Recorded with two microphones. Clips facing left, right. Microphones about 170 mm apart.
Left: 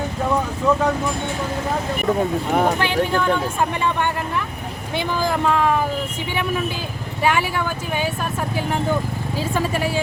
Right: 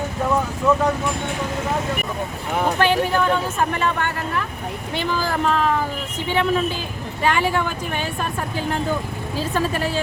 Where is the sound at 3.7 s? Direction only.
15° left (ahead or behind).